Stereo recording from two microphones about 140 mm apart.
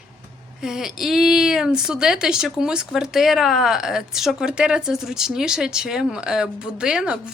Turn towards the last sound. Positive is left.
turn(degrees=-5)  # may be behind; listen again after turning